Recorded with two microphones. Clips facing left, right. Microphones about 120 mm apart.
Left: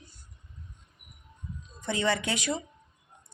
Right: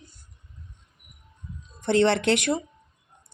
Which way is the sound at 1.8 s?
65° right (ahead or behind).